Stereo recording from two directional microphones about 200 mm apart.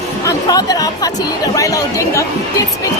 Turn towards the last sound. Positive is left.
turn(degrees=15)  # may be behind; listen again after turning